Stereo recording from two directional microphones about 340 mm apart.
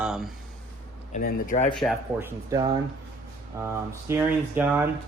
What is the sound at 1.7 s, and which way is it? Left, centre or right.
Speech, centre.